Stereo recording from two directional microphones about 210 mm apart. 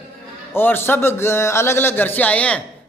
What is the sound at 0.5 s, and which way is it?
Speech, 10° left (ahead or behind).